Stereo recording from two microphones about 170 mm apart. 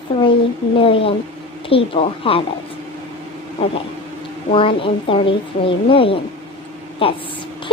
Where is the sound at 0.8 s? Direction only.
35° left (ahead or behind).